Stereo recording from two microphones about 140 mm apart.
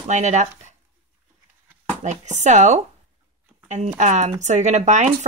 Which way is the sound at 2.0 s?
55° right (ahead or behind).